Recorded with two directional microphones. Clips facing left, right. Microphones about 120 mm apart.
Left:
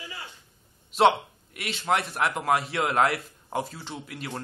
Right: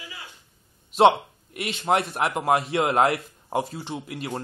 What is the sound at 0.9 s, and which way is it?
A man's voice, 25° right (ahead or behind).